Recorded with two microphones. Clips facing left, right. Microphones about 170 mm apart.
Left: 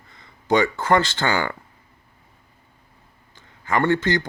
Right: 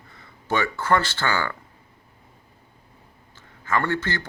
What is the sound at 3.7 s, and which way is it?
Speech, 20° left (ahead or behind).